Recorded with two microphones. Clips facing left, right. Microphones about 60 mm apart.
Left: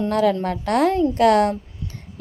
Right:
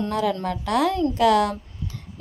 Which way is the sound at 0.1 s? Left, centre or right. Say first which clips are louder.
Left 5 dB; left.